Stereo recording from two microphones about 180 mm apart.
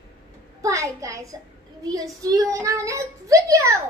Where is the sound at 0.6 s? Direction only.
15° right (ahead or behind).